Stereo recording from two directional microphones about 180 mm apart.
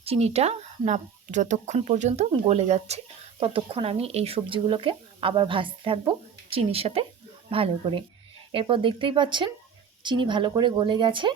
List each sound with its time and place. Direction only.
0.0 s speech: 35° right (ahead or behind)